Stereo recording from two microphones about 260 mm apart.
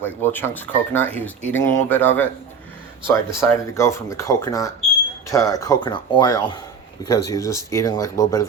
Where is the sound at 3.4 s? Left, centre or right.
Centre.